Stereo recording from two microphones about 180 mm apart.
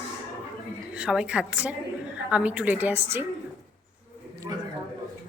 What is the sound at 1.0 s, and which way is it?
Speech, 5° right (ahead or behind).